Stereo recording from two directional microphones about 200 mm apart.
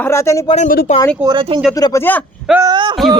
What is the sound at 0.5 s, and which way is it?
Speech, 45° left (ahead or behind).